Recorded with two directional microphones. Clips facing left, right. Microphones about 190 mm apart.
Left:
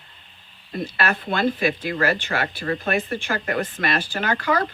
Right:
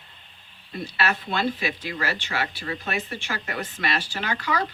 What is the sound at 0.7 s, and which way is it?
Speech, 50° left (ahead or behind).